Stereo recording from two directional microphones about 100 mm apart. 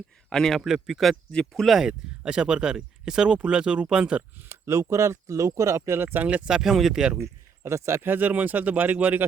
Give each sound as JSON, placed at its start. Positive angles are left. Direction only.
{"t": 0.3, "sound": "a man's voice", "side_deg": 5}
{"t": 4.4, "sound": "speech", "side_deg": -25}
{"t": 6.2, "sound": "speech", "side_deg": -10}
{"t": 7.2, "sound": "speech", "side_deg": -30}